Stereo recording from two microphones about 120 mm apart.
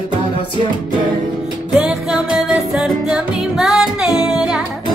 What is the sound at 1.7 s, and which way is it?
Music, 5° right (ahead or behind).